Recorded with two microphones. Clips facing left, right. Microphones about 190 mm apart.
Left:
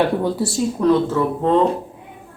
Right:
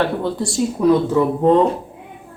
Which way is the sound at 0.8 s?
15° right (ahead or behind).